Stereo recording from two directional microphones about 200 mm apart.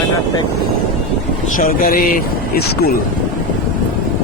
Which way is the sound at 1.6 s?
45° left (ahead or behind).